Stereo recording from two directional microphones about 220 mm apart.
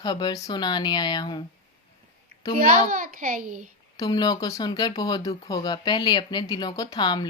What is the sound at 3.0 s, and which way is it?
Speech, 40° right (ahead or behind).